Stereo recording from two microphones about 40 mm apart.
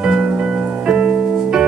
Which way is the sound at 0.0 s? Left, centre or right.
Right.